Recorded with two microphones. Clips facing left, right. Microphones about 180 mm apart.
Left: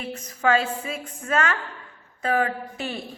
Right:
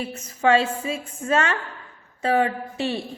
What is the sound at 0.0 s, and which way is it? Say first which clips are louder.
A woman's voice: right 2 dB; 25° right (ahead or behind).